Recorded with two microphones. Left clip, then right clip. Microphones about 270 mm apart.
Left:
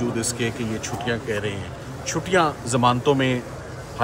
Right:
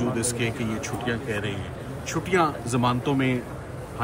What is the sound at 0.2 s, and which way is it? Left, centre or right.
A man's voice, centre.